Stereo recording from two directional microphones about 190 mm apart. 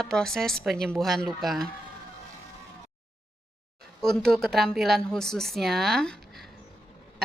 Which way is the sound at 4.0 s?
Centre (ahead or behind).